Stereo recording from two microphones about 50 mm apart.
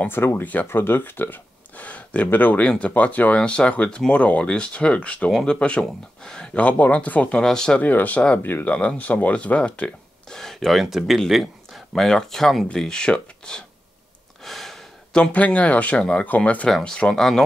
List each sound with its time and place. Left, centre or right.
0.1 s speech: left
1.9 s a sound: left
2.3 s speech: left
2.6 s speech: left
5.3 s speech: centre; by 7.3 s left
7.3 s speech: centre
7.8 s speech: left
8.4 s speech: left
8.6 s speech: left
10.3 s speech: centre
11.9 s speech: centre
14.4 s gasp: centre
15.1 s speech: left
16.8 s speech: centre